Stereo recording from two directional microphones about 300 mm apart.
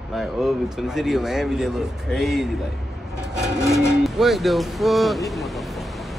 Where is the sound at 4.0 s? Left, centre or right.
Centre.